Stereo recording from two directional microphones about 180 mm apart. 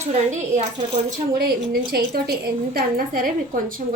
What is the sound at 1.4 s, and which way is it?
A woman's voice, 55° right (ahead or behind).